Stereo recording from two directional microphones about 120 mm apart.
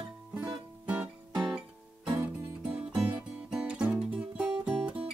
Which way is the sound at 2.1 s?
20° right (ahead or behind).